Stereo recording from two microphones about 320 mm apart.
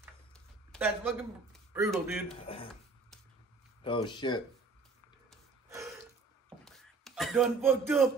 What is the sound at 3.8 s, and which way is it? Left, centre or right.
Speech, centre.